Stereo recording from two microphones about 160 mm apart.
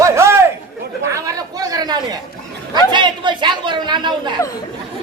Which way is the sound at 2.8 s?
30° right (ahead or behind).